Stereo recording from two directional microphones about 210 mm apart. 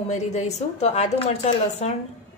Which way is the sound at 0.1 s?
35° left (ahead or behind).